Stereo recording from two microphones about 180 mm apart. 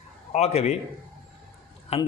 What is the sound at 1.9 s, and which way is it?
Speech, 35° left (ahead or behind).